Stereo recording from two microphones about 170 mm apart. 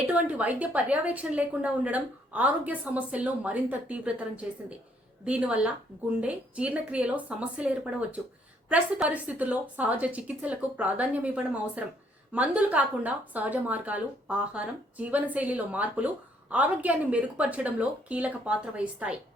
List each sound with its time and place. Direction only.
0.1 s a woman's voice: 10° right (ahead or behind)
8.7 s a woman's voice: 10° right (ahead or behind)